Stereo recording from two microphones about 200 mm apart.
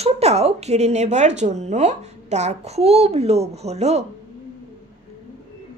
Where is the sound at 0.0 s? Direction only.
30° right (ahead or behind).